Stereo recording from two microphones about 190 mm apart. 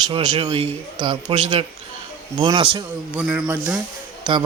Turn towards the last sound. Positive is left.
turn(degrees=-25)  # may be behind; listen again after turning